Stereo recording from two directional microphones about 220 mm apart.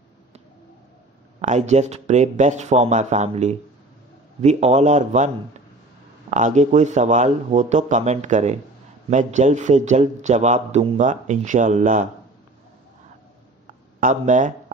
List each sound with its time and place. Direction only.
1.4 s a man's voice: 30° right (ahead or behind)
6.3 s a man's voice: 35° right (ahead or behind)
13.9 s a man's voice: 35° right (ahead or behind)